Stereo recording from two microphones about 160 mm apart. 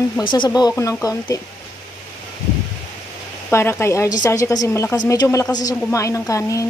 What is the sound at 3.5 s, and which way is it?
A woman's voice, 15° left (ahead or behind).